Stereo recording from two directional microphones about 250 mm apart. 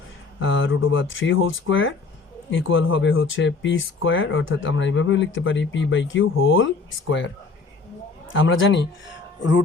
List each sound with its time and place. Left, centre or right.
0.3 s speech: left
8.3 s speech: left